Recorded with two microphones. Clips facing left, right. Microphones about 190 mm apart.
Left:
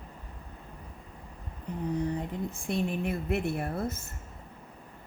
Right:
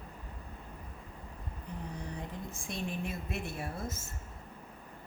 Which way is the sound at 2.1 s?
60° left (ahead or behind).